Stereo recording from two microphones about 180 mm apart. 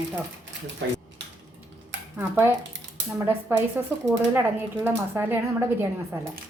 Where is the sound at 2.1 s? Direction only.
10° right (ahead or behind).